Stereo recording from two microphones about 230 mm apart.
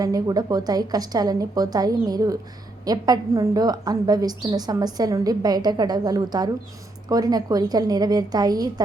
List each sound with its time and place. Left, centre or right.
0.0 s a woman's voice: centre